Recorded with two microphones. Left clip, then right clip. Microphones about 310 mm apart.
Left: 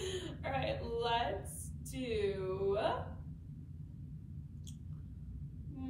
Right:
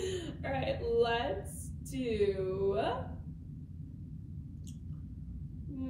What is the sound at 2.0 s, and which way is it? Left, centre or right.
Speech, left.